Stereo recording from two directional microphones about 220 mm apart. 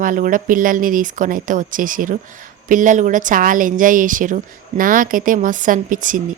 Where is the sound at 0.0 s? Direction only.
40° right (ahead or behind).